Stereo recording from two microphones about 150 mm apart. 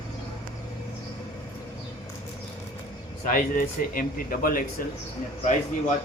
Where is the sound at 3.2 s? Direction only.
65° left (ahead or behind).